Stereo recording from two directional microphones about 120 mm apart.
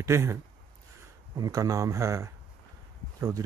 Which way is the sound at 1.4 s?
30° right (ahead or behind).